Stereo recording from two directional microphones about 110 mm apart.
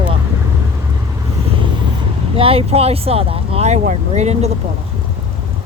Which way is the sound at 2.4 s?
60° right (ahead or behind).